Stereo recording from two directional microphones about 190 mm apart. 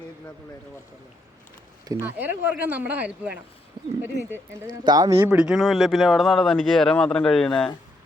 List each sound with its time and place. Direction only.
1.9 s speech: 10° right (ahead or behind)
3.8 s speech: 20° right (ahead or behind); by 7.7 s 5° left (ahead or behind)